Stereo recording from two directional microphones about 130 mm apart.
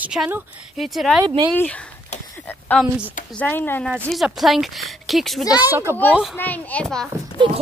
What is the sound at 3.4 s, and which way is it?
Speech, 15° left (ahead or behind).